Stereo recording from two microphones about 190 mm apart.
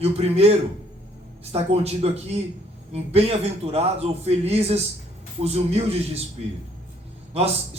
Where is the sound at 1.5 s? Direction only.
35° right (ahead or behind).